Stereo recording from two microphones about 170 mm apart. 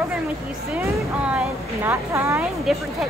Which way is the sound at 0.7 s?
5° right (ahead or behind).